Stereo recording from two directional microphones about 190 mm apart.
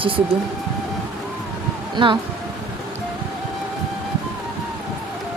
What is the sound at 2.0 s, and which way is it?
Speech, 25° right (ahead or behind).